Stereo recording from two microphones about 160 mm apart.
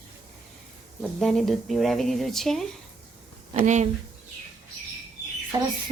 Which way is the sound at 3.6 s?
45° right (ahead or behind).